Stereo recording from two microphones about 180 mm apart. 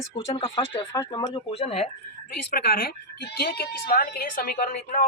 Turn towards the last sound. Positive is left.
turn(degrees=50)  # may be behind; listen again after turning